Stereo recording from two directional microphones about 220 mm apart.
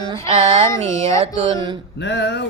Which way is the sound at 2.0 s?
50° left (ahead or behind).